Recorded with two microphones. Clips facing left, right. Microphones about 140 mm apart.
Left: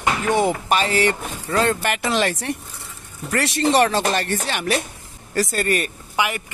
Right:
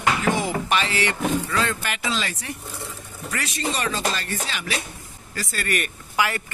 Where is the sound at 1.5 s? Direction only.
50° left (ahead or behind).